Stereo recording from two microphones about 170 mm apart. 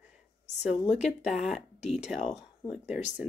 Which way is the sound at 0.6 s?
40° left (ahead or behind).